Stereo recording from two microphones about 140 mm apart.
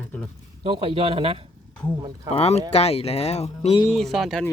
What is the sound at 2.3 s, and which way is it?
Speech, 50° left (ahead or behind).